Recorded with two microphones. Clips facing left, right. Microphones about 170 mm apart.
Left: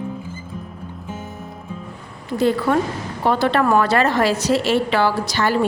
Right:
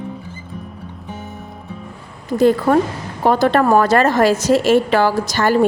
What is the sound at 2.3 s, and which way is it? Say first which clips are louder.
A woman's voice: right 4 dB; 45° right (ahead or behind).